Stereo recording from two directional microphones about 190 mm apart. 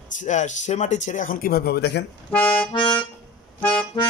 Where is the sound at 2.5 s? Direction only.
25° left (ahead or behind).